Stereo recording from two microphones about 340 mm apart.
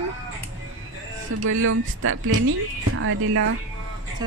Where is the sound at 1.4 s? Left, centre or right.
Right.